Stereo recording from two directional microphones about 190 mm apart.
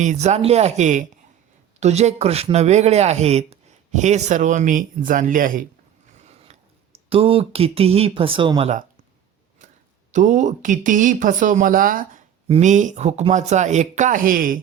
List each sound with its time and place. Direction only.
0.0 s speech: 40° right (ahead or behind)
6.1 s a sound: 35° right (ahead or behind)
7.1 s speech: 30° right (ahead or behind)
10.1 s speech: 40° right (ahead or behind)